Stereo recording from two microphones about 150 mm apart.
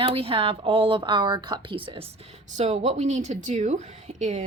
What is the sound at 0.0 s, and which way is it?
A woman's voice, 40° right (ahead or behind).